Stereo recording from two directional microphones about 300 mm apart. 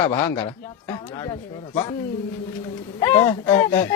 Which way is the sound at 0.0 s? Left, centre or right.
Centre.